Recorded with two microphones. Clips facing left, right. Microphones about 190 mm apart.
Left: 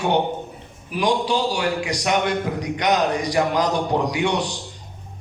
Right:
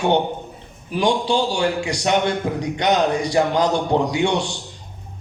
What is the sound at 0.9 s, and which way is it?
A man's voice, 25° right (ahead or behind).